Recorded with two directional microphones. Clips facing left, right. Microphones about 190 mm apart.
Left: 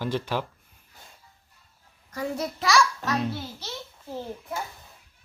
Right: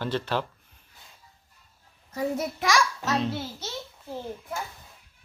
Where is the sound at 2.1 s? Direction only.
25° right (ahead or behind).